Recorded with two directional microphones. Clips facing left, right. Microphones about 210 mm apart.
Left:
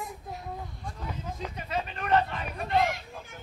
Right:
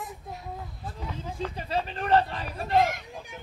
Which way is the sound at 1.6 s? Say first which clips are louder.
Right 2 dB; 30° right (ahead or behind).